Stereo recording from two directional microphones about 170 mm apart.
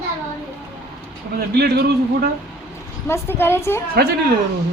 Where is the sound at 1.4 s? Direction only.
70° right (ahead or behind).